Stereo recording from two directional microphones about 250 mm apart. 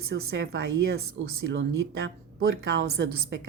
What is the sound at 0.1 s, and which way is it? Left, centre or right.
A woman's voice, right.